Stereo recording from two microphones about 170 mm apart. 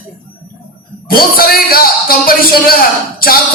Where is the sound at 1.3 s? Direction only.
60° left (ahead or behind).